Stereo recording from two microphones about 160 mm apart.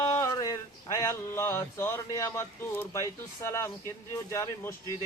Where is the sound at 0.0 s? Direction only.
20° left (ahead or behind).